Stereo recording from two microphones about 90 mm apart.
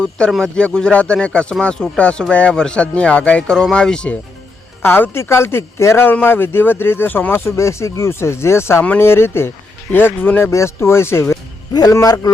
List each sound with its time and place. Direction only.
0.3 s speech: 5° left (ahead or behind)
4.8 s speech: 25° left (ahead or behind)
11.7 s a man's voice: 45° left (ahead or behind)